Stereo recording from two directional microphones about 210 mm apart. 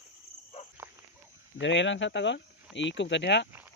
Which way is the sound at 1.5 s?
60° left (ahead or behind).